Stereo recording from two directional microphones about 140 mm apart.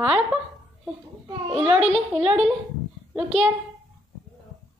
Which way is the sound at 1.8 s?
50° right (ahead or behind).